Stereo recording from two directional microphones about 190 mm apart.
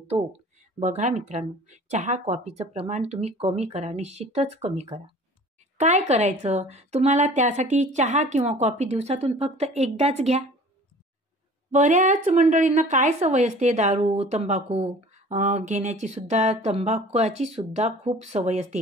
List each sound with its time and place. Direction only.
0.1 s a woman's voice: 30° right (ahead or behind)
11.7 s a woman's voice: 40° right (ahead or behind)